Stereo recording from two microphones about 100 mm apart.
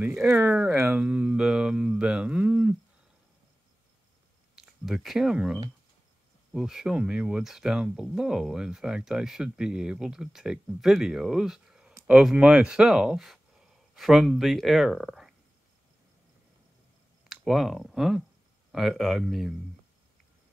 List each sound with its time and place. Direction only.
0.0 s speech: 20° right (ahead or behind)
0.9 s a sound: 15° right (ahead or behind)
4.6 s speech: centre (ahead or behind)
17.3 s speech: 5° right (ahead or behind)